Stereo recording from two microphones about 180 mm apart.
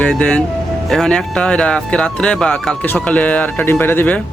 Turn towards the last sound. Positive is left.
turn(degrees=10)  # may be behind; listen again after turning